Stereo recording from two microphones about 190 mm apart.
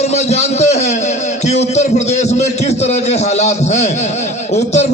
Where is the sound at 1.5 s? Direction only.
35° left (ahead or behind).